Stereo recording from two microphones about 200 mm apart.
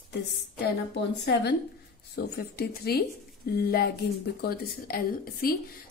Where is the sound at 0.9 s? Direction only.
55° left (ahead or behind).